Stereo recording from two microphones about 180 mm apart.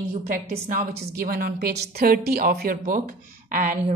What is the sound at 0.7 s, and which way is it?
A woman's voice, 55° right (ahead or behind).